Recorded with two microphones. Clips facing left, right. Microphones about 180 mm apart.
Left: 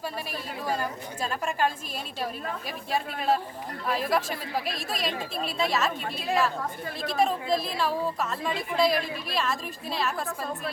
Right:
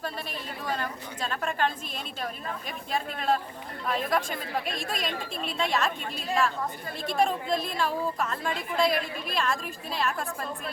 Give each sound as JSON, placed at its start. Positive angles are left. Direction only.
{"t": 0.6, "sound": "a woman's voice", "side_deg": 10}
{"t": 2.9, "sound": "a woman's voice", "side_deg": 5}
{"t": 7.0, "sound": "a woman's voice", "side_deg": 0}